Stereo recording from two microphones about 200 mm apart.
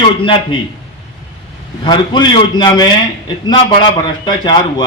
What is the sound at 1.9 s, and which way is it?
A man's voice, 20° left (ahead or behind).